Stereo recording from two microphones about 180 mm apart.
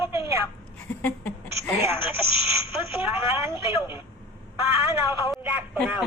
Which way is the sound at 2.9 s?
15° right (ahead or behind).